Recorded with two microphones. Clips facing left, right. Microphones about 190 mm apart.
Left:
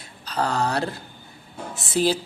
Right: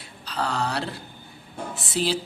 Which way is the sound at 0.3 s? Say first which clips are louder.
Left 3 dB; 45° left (ahead or behind).